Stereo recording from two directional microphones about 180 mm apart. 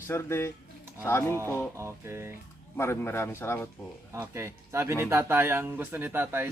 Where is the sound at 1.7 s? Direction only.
15° right (ahead or behind).